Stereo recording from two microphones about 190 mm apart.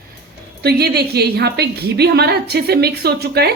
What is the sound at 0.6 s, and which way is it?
A woman's voice, 55° right (ahead or behind).